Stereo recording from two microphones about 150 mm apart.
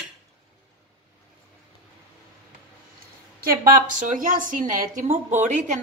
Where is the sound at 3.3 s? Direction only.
75° right (ahead or behind).